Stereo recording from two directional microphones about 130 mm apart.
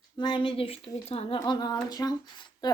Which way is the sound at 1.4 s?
35° left (ahead or behind).